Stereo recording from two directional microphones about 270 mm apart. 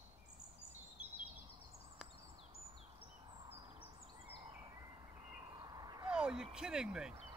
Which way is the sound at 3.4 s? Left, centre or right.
Centre.